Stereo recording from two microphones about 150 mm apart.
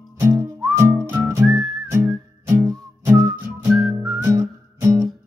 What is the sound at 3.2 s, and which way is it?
Whistling, centre (ahead or behind).